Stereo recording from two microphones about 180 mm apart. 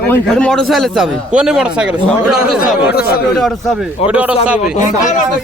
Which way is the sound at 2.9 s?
60° left (ahead or behind).